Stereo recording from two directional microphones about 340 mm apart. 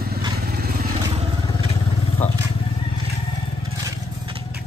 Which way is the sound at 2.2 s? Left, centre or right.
Centre.